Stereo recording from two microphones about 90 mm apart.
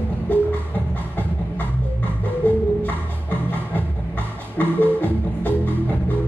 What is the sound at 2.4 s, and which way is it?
Music, 20° left (ahead or behind).